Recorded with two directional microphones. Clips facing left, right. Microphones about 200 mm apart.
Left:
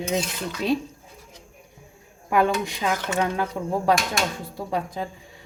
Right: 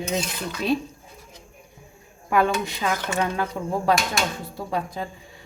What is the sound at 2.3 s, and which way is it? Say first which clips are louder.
A woman's voice: even; 15° left (ahead or behind).